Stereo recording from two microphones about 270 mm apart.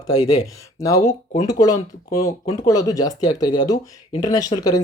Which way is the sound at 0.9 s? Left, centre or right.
Left.